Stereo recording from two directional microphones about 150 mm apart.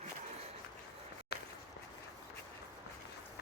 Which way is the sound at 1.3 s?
90° left.